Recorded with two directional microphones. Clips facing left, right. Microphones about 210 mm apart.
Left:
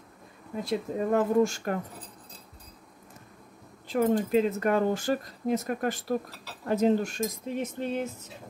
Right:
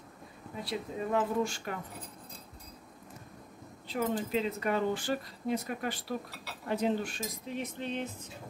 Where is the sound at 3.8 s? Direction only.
45° left (ahead or behind).